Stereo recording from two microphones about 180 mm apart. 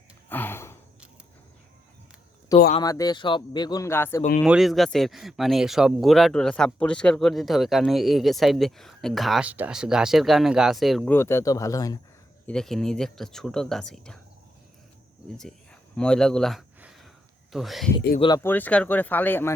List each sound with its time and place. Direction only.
0.3 s gasp: 10° left (ahead or behind)
2.5 s speech: 20° left (ahead or behind)
4.4 s speech: centre (ahead or behind)
11.1 s speech: 15° left (ahead or behind)
12.5 s speech: 5° left (ahead or behind)
15.4 s a sound: 5° left (ahead or behind)
17.5 s speech: centre (ahead or behind)
18.2 s speech: 25° left (ahead or behind)
18.4 s speech: 10° left (ahead or behind)